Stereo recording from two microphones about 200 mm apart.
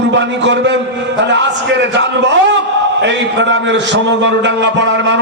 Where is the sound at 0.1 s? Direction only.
65° right (ahead or behind).